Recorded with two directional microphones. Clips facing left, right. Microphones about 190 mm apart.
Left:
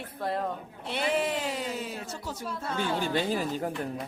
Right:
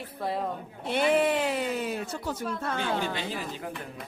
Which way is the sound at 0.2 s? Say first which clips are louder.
Even; centre (ahead or behind).